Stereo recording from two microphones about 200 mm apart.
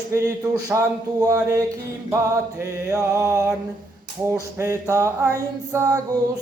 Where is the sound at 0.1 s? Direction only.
15° right (ahead or behind).